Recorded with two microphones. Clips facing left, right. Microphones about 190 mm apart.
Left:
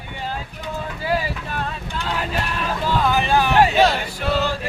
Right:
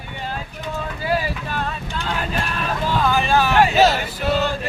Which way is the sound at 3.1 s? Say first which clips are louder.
Even; 20° left (ahead or behind).